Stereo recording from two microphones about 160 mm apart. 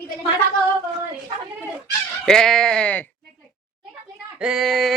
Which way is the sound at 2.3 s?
5° left (ahead or behind).